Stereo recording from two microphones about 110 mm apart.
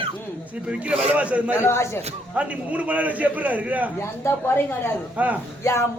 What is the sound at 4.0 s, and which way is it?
Speech, 20° left (ahead or behind).